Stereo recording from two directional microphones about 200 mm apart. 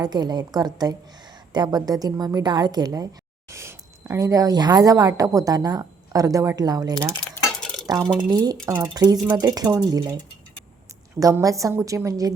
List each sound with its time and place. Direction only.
0.0 s a woman's voice: 20° right (ahead or behind)
7.3 s cutlery: 5° left (ahead or behind)
7.9 s a woman's voice: 20° right (ahead or behind)